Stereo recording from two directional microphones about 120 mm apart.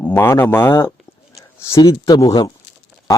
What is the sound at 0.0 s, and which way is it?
Speech, 15° left (ahead or behind).